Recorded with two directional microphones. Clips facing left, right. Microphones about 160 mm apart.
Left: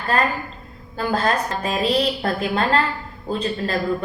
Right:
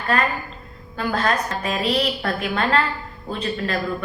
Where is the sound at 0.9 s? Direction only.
35° left (ahead or behind).